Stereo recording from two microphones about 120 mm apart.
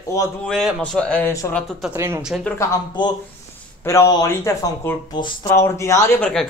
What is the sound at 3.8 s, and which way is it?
Speech, 25° left (ahead or behind).